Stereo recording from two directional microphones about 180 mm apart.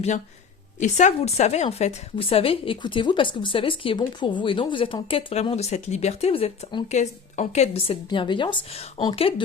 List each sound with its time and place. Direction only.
0.8 s a woman's voice: 40° left (ahead or behind)